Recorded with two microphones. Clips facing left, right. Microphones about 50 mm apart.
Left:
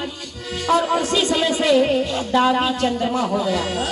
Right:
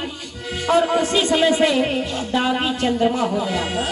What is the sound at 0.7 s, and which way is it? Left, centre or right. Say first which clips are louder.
Speech: right 1 dB; right.